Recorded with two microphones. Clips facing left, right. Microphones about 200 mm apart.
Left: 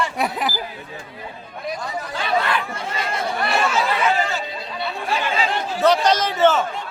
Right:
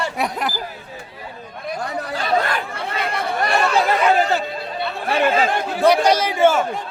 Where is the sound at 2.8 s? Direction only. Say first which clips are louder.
Right 2 dB; 60° right (ahead or behind).